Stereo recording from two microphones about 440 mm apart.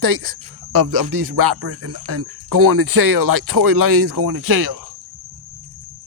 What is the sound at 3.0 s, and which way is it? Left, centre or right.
Speech, right.